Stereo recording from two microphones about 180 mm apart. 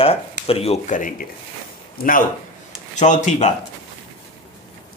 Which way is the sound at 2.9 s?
40° left (ahead or behind).